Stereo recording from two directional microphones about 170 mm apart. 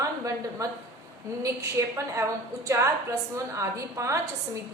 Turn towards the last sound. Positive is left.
turn(degrees=-20)  # may be behind; listen again after turning